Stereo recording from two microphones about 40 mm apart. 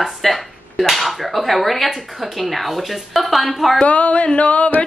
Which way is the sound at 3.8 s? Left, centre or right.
Left.